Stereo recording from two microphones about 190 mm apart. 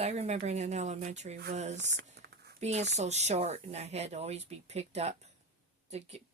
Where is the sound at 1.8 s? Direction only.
70° right (ahead or behind).